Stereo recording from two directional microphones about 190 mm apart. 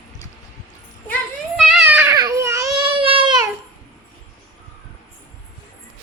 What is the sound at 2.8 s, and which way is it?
Baby cry, 25° right (ahead or behind).